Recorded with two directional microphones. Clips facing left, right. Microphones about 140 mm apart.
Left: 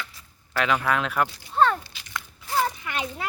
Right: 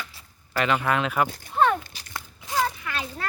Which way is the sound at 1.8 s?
50° right (ahead or behind).